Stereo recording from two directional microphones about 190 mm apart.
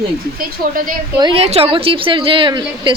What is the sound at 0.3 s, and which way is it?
Speech, 50° right (ahead or behind).